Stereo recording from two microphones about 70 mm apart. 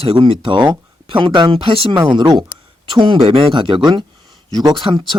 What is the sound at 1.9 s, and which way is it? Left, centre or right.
Speech, right.